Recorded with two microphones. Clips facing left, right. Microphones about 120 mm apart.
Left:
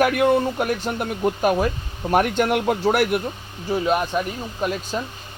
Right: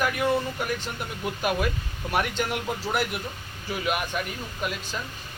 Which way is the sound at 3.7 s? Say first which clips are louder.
Left 7 dB; 30° left (ahead or behind).